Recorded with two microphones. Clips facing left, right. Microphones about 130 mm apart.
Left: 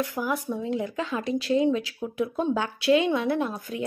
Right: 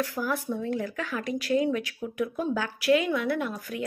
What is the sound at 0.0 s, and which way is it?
A woman's voice, 15° left (ahead or behind).